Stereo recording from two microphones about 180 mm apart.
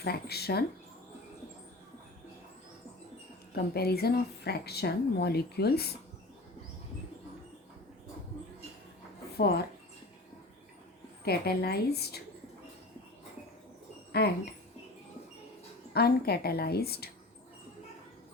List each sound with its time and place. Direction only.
0.0 s speech: 60° left (ahead or behind)
3.5 s speech: 60° left (ahead or behind)
9.4 s speech: 60° left (ahead or behind)
11.3 s speech: 60° left (ahead or behind)
14.1 s speech: 60° left (ahead or behind)
15.9 s speech: 60° left (ahead or behind)